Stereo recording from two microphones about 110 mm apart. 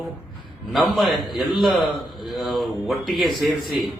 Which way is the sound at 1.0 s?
Centre (ahead or behind).